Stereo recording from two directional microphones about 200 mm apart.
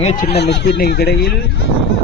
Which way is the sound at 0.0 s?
30° left (ahead or behind).